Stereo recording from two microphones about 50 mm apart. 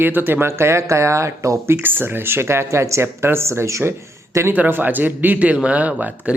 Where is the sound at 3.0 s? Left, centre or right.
Right.